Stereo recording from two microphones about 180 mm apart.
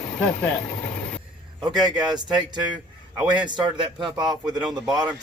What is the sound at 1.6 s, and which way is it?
Speech, 25° right (ahead or behind).